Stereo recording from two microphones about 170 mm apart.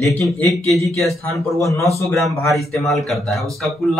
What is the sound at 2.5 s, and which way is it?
Speech, centre (ahead or behind).